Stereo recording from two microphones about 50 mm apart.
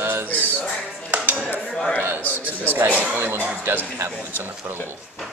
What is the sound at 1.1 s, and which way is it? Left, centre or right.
Dishes, right.